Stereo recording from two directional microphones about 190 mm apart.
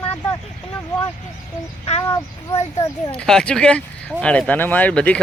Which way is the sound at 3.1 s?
5° left (ahead or behind).